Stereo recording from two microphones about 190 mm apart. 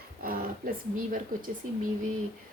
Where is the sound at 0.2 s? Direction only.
50° right (ahead or behind).